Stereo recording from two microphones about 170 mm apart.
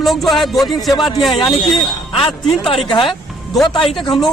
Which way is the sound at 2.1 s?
30° left (ahead or behind).